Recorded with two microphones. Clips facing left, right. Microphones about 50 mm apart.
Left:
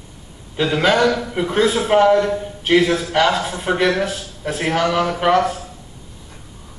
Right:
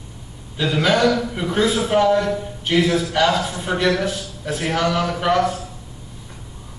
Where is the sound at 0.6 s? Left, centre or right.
Left.